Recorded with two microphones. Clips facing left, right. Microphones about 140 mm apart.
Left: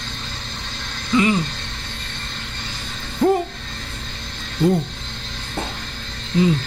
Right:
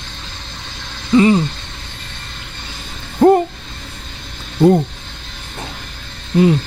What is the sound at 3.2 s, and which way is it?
Speech, 60° right (ahead or behind).